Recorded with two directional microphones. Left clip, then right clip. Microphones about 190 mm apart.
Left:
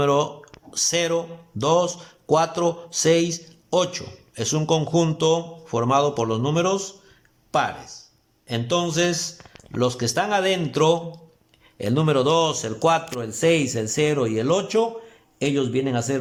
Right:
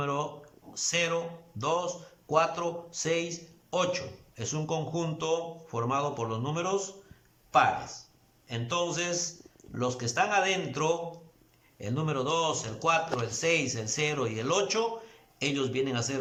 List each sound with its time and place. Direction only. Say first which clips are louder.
0.0 s a man's voice: left 12 dB; 35° left (ahead or behind)